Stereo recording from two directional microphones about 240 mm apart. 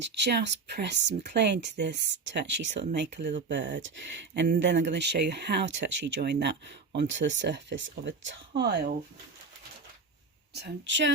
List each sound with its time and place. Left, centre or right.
0.0 s speech: right
10.5 s speech: right